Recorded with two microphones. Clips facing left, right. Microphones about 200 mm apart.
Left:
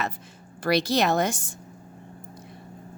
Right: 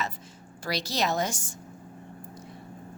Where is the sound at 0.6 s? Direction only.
60° left (ahead or behind).